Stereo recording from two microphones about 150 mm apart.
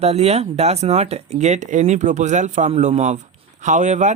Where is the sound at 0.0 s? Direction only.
45° right (ahead or behind).